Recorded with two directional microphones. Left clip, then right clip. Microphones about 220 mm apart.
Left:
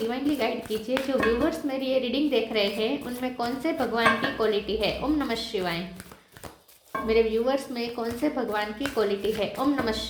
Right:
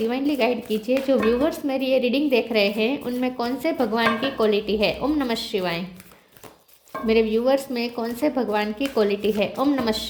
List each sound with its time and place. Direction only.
0.1 s a woman's voice: 45° right (ahead or behind)
7.1 s a woman's voice: 40° right (ahead or behind)